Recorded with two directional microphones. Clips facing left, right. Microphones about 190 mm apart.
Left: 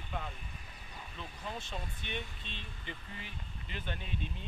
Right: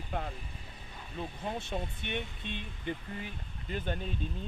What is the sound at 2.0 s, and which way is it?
Speech, 55° right (ahead or behind).